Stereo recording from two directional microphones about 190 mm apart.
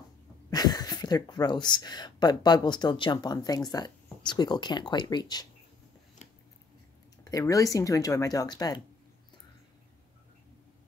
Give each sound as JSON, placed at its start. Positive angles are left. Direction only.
{"t": 0.5, "sound": "speech", "side_deg": 20}
{"t": 7.2, "sound": "speech", "side_deg": 15}